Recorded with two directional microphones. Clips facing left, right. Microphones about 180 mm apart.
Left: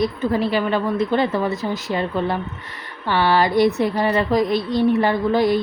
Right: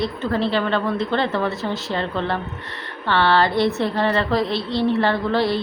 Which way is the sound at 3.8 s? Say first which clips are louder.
Left 1 dB; 15° left (ahead or behind).